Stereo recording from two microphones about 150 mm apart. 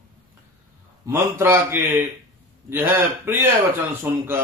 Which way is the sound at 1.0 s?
20° right (ahead or behind).